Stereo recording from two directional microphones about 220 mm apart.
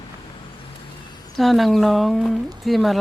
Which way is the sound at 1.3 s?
Centre (ahead or behind).